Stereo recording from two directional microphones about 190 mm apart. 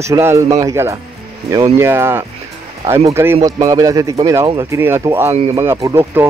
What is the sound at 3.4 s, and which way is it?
Speech, 20° right (ahead or behind).